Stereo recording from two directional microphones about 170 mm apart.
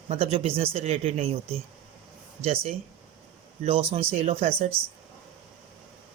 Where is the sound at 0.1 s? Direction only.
35° right (ahead or behind).